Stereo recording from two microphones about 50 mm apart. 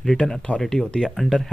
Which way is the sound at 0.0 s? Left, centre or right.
Centre.